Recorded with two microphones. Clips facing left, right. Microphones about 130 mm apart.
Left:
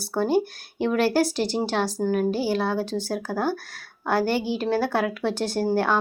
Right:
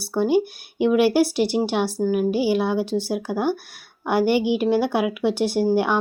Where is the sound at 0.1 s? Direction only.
10° right (ahead or behind).